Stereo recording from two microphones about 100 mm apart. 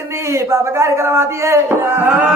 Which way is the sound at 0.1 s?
30° right (ahead or behind).